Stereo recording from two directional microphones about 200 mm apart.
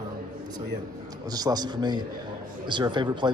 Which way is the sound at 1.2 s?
20° right (ahead or behind).